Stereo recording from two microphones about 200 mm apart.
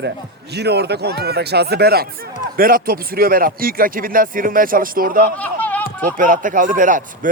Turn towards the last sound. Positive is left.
turn(degrees=-40)  # may be behind; listen again after turning